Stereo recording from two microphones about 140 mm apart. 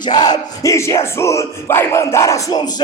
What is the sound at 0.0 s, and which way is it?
Music, 30° left (ahead or behind).